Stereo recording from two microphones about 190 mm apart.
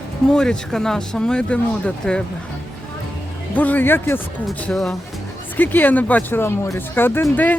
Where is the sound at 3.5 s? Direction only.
10° left (ahead or behind).